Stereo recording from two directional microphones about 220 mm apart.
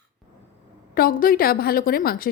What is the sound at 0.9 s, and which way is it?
Speech, 40° left (ahead or behind).